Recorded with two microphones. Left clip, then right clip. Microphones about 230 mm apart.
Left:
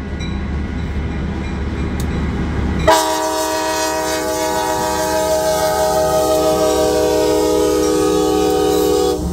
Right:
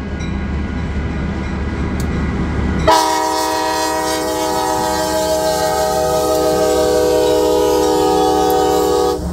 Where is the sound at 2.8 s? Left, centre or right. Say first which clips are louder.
Right 1 dB; centre.